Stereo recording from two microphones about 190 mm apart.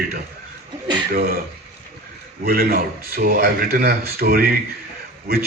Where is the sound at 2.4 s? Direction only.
50° right (ahead or behind).